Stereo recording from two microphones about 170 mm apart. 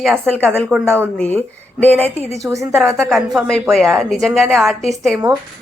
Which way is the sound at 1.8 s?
10° left (ahead or behind).